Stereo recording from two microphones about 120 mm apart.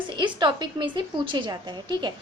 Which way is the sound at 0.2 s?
40° right (ahead or behind).